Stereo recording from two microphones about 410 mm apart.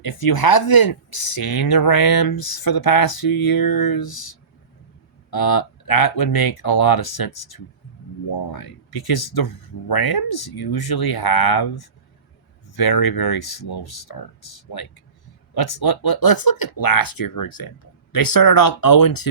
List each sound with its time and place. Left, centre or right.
0.0 s speech: left